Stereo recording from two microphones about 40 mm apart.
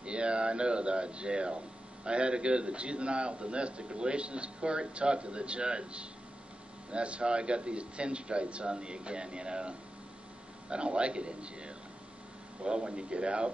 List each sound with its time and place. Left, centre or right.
0.0 s a man's voice: right